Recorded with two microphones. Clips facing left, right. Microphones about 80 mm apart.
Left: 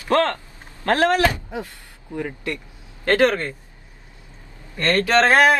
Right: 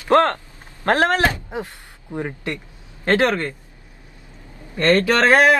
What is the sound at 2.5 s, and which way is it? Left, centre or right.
Speech, right.